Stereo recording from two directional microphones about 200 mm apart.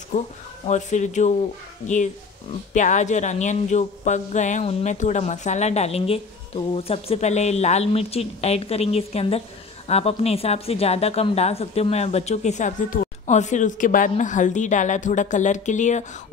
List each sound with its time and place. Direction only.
0.1 s speech: 35° left (ahead or behind)
2.7 s speech: 40° left (ahead or behind)